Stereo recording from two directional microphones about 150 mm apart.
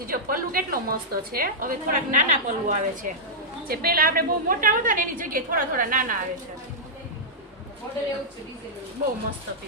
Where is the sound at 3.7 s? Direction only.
80° right.